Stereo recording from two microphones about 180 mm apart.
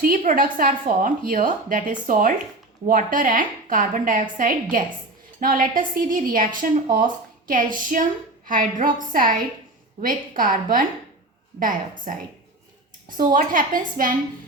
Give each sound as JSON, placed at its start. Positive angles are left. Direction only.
{"t": 0.0, "sound": "a woman's voice", "side_deg": -45}
{"t": 13.1, "sound": "a woman's voice", "side_deg": -45}